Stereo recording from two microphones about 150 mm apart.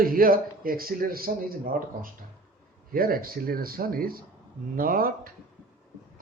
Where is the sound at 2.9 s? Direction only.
75° right (ahead or behind).